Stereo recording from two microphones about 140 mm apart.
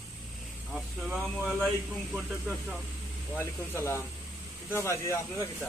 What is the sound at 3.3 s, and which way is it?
Speech, 15° left (ahead or behind).